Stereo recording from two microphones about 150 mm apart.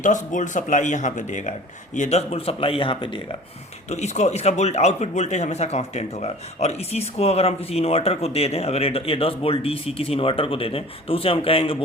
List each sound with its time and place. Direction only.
0.0 s speech: 55° left (ahead or behind); by 3.2 s 35° left (ahead or behind)
3.8 s speech: 50° left (ahead or behind)